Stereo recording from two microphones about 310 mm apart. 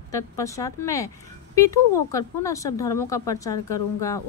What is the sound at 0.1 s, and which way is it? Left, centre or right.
Speech, centre.